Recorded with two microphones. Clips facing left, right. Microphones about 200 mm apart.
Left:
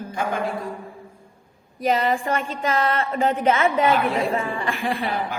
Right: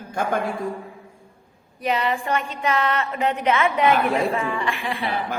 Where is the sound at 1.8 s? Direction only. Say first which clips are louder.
Left 2 dB; 40° left (ahead or behind).